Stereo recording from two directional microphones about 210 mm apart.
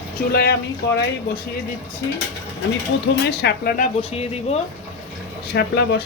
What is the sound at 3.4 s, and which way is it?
Speech, 45° left (ahead or behind).